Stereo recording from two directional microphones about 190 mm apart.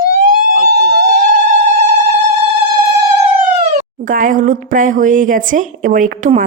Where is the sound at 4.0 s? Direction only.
45° right (ahead or behind).